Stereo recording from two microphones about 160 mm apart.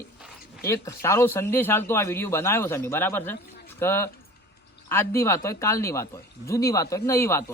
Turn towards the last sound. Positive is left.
turn(degrees=15)  # may be behind; listen again after turning